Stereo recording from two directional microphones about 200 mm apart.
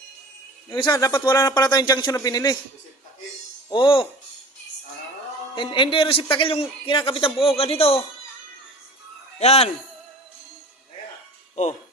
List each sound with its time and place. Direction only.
0.7 s a man's voice: 20° left (ahead or behind)
3.7 s a man's voice: 25° left (ahead or behind)
5.5 s a man's voice: 25° left (ahead or behind)
9.4 s a man's voice: 30° left (ahead or behind)